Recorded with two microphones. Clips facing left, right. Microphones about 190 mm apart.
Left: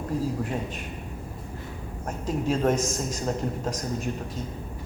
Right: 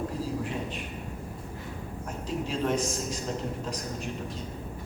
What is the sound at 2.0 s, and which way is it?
A man's voice, 45° left (ahead or behind).